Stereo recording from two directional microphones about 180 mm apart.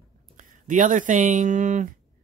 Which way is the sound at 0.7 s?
45° right (ahead or behind).